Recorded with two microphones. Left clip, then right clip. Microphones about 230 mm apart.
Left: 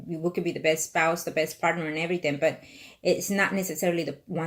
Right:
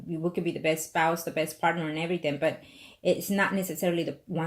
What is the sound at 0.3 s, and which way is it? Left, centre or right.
Speech, centre.